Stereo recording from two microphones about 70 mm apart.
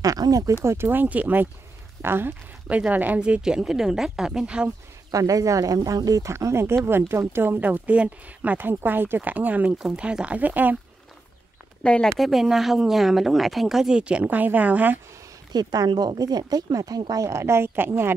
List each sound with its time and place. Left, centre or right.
0.0 s speech: right
0.7 s speech: right
2.7 s a woman's voice: right
5.1 s speech: right; by 8.5 s centre
8.5 s speech: right
9.8 s a woman's voice: centre
11.8 s speech: centre
12.2 s speech: centre
14.2 s speech: right
15.5 s speech: right